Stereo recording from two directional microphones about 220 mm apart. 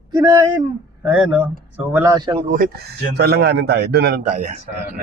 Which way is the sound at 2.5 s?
40° right (ahead or behind).